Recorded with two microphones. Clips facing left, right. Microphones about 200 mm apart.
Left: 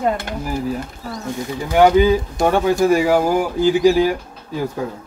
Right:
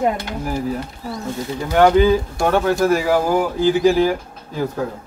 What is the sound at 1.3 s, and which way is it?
Speech, 15° left (ahead or behind).